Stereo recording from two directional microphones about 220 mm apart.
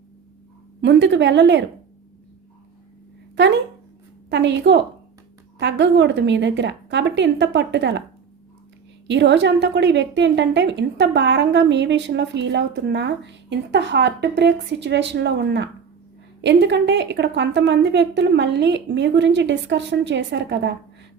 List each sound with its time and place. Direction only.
0.8 s a woman's voice: 55° right (ahead or behind)
3.3 s a woman's voice: 55° right (ahead or behind)
9.0 s a woman's voice: 55° right (ahead or behind)